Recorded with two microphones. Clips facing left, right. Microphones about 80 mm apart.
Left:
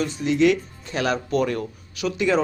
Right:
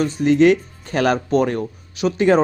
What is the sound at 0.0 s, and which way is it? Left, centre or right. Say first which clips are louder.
Speech: right 5 dB; right.